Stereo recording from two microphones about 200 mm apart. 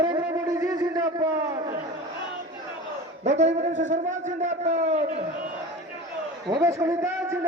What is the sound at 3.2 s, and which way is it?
A man's voice, 35° right (ahead or behind).